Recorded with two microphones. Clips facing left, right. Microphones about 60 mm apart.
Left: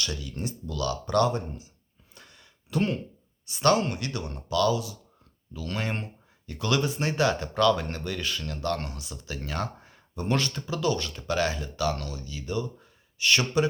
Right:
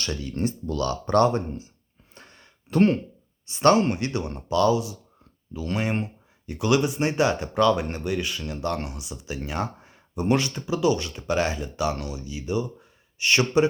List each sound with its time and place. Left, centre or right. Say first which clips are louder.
0.0 s speech: right 6 dB; right
2.1 s a sound: right 3 dB; right
3.4 s speech: right 4 dB; right